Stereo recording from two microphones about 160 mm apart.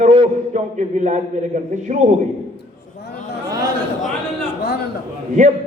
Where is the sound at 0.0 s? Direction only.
45° right (ahead or behind).